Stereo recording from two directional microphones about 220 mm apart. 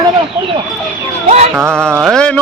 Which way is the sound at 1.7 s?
5° left (ahead or behind).